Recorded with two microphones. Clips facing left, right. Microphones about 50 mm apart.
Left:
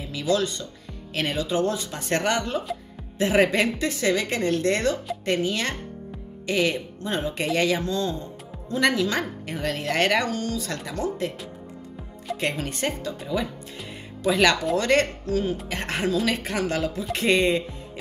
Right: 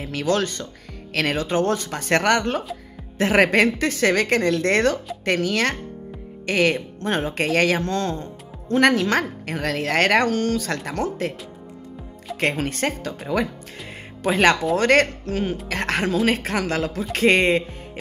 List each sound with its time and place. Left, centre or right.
0.0 s speech: right
9.6 s speech: right
12.4 s speech: right
13.8 s music: right
15.2 s speech: right
15.7 s speech: right
16.3 s speech: right